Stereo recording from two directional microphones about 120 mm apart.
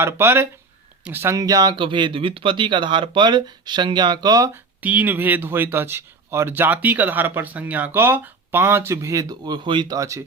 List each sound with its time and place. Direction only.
0.0 s speech: 20° right (ahead or behind)
4.8 s speech: 15° right (ahead or behind); by 9.8 s 40° right (ahead or behind)
9.9 s speech: 25° right (ahead or behind)